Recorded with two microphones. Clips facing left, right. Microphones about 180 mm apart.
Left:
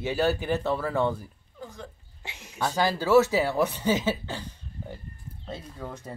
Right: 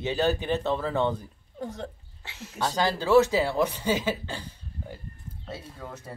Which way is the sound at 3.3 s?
15° left (ahead or behind).